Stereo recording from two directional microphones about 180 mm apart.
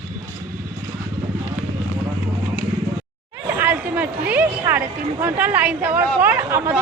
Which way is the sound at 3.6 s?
10° right (ahead or behind).